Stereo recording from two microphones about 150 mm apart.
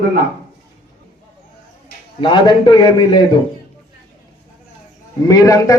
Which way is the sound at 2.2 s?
35° left (ahead or behind).